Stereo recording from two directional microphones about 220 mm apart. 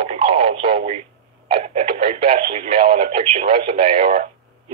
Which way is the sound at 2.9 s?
40° right (ahead or behind).